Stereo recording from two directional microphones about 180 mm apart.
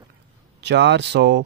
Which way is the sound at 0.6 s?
75° right (ahead or behind).